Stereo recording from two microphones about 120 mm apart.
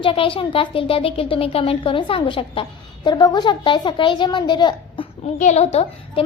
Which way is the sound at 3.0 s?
35° left (ahead or behind).